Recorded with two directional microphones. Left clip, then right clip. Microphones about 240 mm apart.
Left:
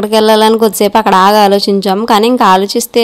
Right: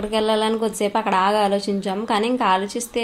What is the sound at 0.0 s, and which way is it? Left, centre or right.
A woman's voice, left.